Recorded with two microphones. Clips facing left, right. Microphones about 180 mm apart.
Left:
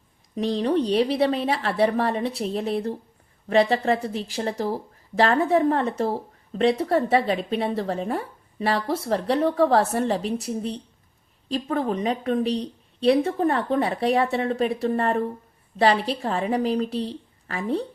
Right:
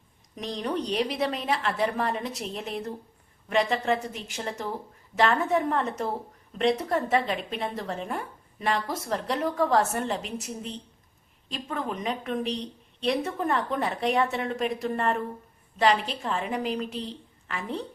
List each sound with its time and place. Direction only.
0.3 s a woman's voice: 35° left (ahead or behind)